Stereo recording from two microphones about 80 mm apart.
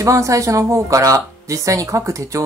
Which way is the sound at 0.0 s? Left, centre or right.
Right.